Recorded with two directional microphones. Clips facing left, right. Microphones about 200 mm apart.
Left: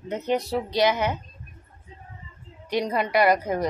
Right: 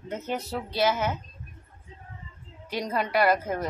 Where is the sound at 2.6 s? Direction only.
15° left (ahead or behind).